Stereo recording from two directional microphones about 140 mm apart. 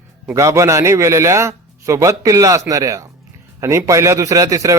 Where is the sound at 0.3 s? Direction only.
20° right (ahead or behind).